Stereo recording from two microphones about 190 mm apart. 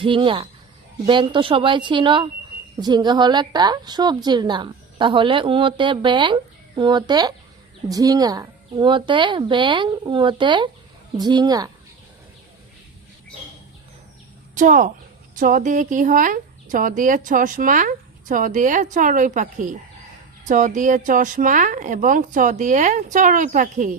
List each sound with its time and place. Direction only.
0.0 s a woman's voice: 25° right (ahead or behind)
14.5 s a woman's voice: 45° right (ahead or behind)